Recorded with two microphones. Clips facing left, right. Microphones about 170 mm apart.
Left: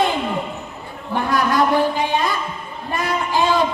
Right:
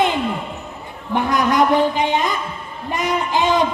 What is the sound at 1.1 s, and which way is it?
A woman's voice, 20° right (ahead or behind).